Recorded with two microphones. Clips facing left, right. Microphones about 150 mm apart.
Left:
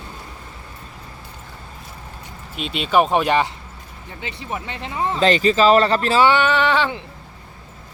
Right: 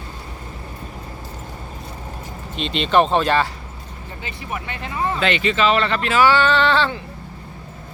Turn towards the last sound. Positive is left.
turn(degrees=15)  # may be behind; listen again after turning